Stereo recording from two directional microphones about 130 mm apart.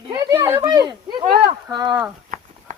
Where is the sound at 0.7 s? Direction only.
30° right (ahead or behind).